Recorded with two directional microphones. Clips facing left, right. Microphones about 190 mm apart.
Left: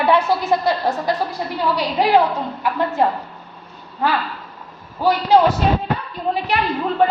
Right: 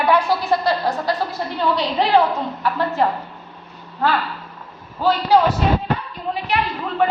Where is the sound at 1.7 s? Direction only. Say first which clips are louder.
Left 1 dB; 10° left (ahead or behind).